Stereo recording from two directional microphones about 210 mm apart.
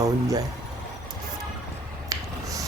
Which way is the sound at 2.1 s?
15° right (ahead or behind).